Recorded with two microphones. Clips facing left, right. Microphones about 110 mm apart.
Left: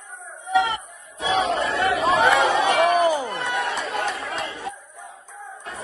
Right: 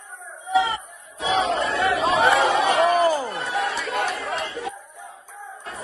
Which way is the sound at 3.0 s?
20° left (ahead or behind).